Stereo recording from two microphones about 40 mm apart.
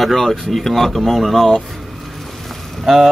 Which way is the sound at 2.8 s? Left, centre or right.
Centre.